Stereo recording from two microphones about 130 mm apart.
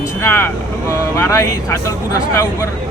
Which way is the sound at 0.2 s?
20° left (ahead or behind).